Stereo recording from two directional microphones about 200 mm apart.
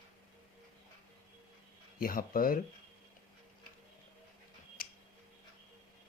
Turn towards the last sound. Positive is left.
turn(degrees=50)  # may be behind; listen again after turning